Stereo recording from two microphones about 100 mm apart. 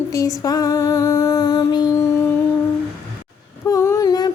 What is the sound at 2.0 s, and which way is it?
Music, 30° left (ahead or behind).